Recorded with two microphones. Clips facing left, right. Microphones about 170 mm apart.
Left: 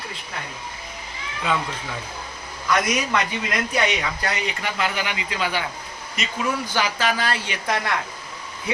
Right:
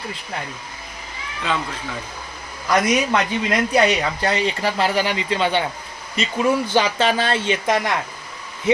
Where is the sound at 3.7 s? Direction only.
35° right (ahead or behind).